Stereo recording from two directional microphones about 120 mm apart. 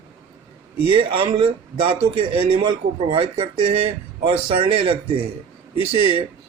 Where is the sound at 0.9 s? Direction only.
45° right (ahead or behind).